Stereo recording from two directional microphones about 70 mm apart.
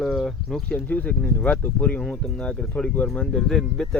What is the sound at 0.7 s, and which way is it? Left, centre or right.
Speech, left.